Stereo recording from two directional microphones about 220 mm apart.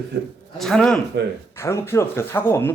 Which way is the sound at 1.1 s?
50° right (ahead or behind).